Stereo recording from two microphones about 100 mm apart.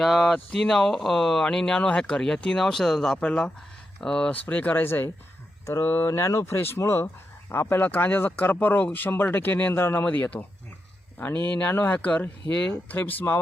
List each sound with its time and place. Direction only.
0.0 s speech: 5° left (ahead or behind); by 13.4 s 20° left (ahead or behind)